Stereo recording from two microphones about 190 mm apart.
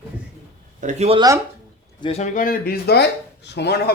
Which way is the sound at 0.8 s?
35° right (ahead or behind).